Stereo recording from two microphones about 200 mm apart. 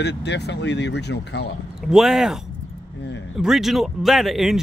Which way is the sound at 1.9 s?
Centre (ahead or behind).